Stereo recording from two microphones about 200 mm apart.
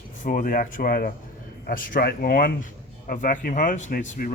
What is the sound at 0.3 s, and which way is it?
Speech, 45° left (ahead or behind).